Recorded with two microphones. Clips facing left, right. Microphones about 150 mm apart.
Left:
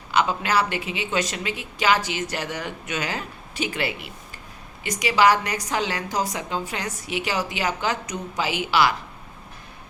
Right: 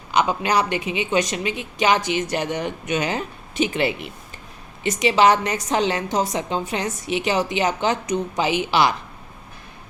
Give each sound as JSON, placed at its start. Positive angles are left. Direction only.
{"t": 0.1, "sound": "a woman's voice", "side_deg": -15}